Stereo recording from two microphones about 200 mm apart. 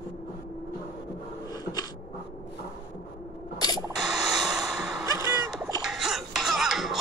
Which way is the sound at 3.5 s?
20° left (ahead or behind).